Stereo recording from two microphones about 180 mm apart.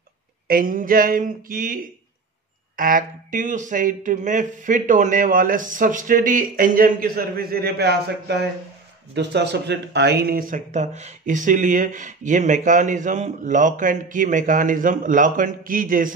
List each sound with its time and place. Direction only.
0.5 s speech: 50° right (ahead or behind)
9.1 s speech: 70° right (ahead or behind); by 16.1 s 50° right (ahead or behind)